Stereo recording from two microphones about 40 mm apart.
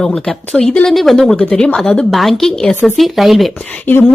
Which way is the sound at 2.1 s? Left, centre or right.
Centre.